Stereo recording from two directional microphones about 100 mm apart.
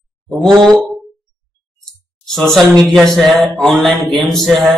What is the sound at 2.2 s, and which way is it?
Speech, 5° left (ahead or behind).